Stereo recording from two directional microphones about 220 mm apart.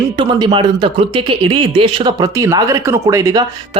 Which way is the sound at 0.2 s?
20° right (ahead or behind).